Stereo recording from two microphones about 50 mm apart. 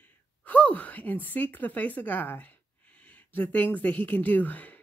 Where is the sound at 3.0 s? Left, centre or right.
Left.